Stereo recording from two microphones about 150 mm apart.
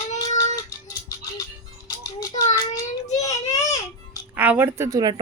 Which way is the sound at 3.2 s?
20° left (ahead or behind).